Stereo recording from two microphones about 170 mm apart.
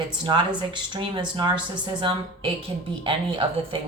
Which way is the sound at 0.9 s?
25° right (ahead or behind).